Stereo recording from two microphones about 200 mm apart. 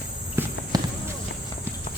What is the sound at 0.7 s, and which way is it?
Run, 20° right (ahead or behind).